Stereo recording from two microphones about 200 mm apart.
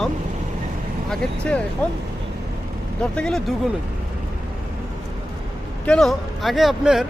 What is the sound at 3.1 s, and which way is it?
Speech, 5° left (ahead or behind).